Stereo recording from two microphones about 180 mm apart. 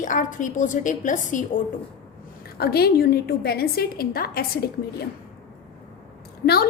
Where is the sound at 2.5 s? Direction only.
60° left (ahead or behind).